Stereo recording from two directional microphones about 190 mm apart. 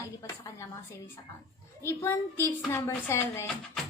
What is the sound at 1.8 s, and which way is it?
A woman's voice, 15° left (ahead or behind).